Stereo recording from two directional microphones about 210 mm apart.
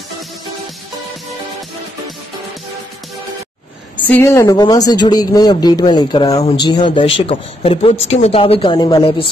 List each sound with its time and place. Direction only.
4.1 s speech: 10° left (ahead or behind)